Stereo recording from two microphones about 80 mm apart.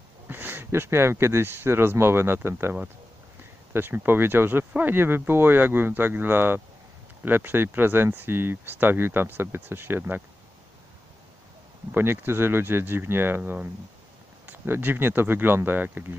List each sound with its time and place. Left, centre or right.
0.3 s speech: right
11.9 s speech: right